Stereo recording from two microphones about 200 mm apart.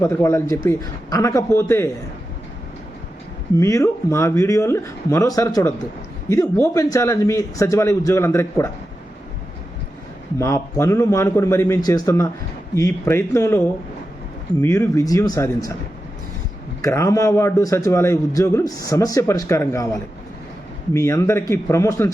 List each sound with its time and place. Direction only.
0.0 s a man's voice: 15° left (ahead or behind)
3.6 s a man's voice: 15° left (ahead or behind)
10.3 s a man's voice: 15° left (ahead or behind)
16.8 s a man's voice: 15° left (ahead or behind)